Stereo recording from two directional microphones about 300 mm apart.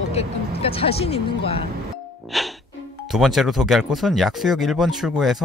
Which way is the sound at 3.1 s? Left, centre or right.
Centre.